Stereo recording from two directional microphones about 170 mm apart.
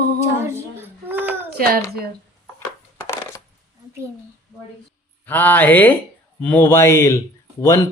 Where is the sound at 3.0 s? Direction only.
15° left (ahead or behind).